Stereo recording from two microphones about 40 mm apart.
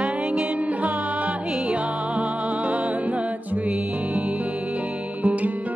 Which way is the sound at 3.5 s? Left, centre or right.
Right.